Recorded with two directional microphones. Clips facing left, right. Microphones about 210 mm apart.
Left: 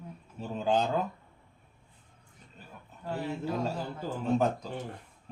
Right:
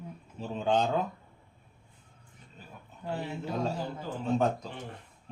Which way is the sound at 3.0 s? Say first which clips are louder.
Even; 20° right (ahead or behind).